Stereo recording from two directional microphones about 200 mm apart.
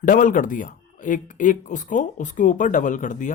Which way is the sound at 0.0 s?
40° left (ahead or behind).